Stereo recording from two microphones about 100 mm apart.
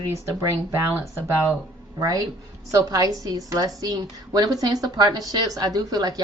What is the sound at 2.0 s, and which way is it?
Speech, 35° right (ahead or behind).